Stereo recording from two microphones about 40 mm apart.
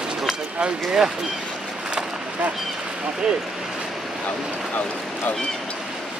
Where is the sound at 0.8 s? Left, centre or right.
Centre.